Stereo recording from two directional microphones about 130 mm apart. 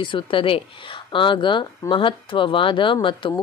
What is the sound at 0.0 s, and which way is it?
Speech, 40° left (ahead or behind).